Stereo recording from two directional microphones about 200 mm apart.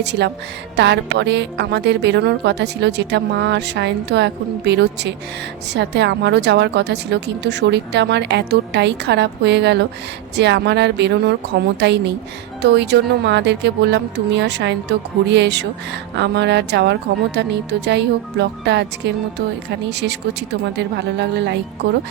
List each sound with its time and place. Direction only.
0.0 s a woman's voice: 60° right (ahead or behind)